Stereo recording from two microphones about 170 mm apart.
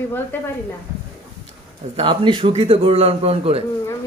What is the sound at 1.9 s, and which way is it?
A man's voice, 30° right (ahead or behind).